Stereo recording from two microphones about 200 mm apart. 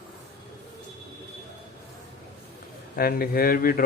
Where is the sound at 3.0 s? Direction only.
50° left (ahead or behind).